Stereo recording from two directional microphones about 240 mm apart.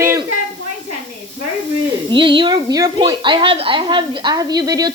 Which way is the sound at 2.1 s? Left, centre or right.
Centre.